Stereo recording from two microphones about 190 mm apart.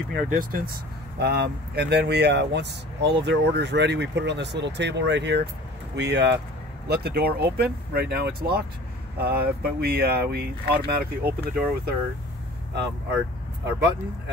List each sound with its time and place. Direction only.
0.1 s speech: 50° right (ahead or behind)
1.2 s speech: 60° right (ahead or behind)
13.7 s speech: 60° right (ahead or behind)